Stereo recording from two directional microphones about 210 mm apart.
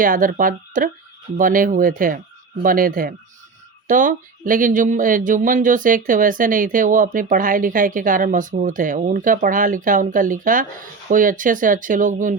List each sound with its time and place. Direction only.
0.0 s speech: 40° right (ahead or behind)